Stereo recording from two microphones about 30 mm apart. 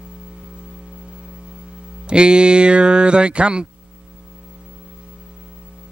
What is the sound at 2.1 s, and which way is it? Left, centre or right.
Speech, right.